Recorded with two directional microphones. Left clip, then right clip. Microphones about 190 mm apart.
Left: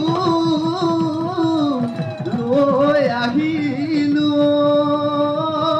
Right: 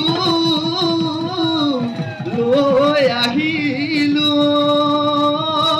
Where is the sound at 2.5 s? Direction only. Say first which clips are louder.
Right 1 dB; 40° left (ahead or behind).